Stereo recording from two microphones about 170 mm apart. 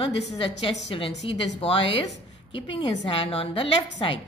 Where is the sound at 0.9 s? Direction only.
30° left (ahead or behind).